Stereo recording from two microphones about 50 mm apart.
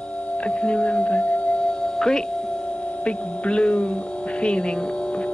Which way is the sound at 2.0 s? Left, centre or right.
Centre.